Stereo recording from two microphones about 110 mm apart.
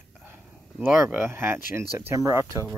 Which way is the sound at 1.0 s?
20° right (ahead or behind).